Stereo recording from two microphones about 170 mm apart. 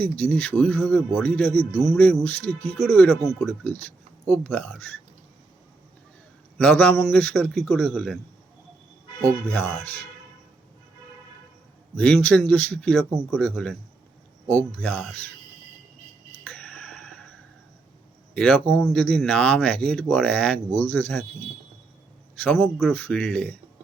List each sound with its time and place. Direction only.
0.0 s speech: 10° left (ahead or behind)
6.6 s speech: 10° left (ahead or behind)
11.9 s speech: 5° left (ahead or behind)
16.4 s a sound: 5° left (ahead or behind)
18.3 s speech: 5° left (ahead or behind)
22.4 s speech: centre (ahead or behind)